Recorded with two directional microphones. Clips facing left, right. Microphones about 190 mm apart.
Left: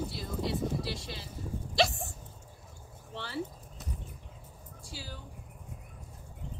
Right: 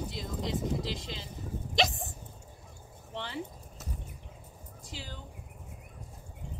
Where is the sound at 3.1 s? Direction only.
20° right (ahead or behind).